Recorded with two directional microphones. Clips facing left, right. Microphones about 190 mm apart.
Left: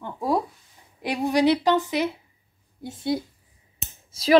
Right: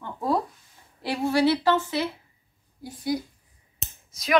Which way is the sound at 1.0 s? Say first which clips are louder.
Left 2 dB; 15° left (ahead or behind).